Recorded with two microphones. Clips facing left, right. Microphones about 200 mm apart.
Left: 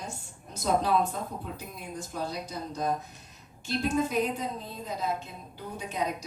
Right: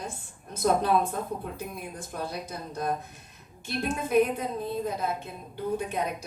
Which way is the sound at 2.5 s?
55° right (ahead or behind).